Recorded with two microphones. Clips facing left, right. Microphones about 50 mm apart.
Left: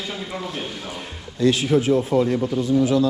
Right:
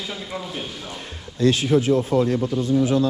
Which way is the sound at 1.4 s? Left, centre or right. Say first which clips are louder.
Even; right.